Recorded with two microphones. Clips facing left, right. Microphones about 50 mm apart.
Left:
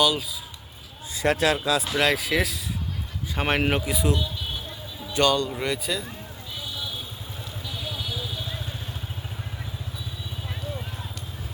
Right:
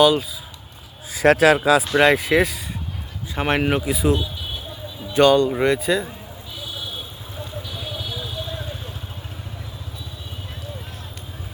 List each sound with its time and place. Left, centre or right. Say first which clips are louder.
0.0 s speech: right 7 dB; centre
1.2 s speech: right 8 dB; right
2.0 s speech: right 7 dB; centre
3.3 s speech: right 3 dB; centre
5.0 s speech: right 7 dB; centre